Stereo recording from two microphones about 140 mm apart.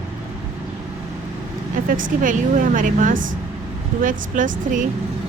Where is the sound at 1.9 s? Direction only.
75° right (ahead or behind).